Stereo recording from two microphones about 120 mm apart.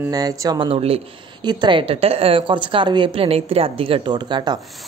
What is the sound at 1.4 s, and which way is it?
A woman's voice, 40° right (ahead or behind).